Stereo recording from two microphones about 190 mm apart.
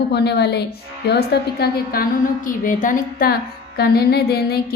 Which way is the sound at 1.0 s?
60° left (ahead or behind).